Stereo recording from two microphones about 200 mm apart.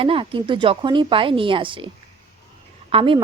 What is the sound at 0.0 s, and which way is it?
Speech, 25° right (ahead or behind).